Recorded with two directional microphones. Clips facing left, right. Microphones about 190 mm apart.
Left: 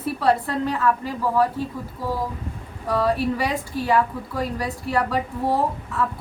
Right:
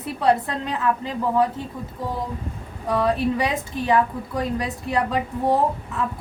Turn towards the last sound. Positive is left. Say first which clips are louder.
# right 1 dB
turn(degrees=-20)  # may be behind; listen again after turning